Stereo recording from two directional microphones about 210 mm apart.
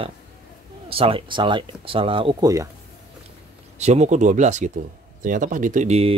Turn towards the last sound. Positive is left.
turn(degrees=-30)  # may be behind; listen again after turning